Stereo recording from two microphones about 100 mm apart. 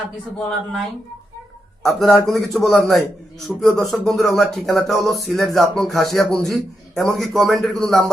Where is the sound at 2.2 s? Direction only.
Centre (ahead or behind).